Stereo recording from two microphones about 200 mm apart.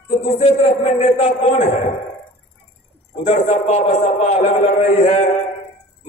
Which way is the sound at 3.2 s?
35° left (ahead or behind).